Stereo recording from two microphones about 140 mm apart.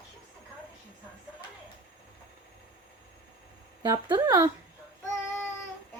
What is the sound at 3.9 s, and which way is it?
Child singing, 30° right (ahead or behind).